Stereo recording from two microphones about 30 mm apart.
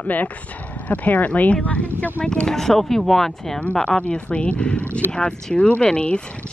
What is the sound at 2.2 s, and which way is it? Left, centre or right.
Speech, left.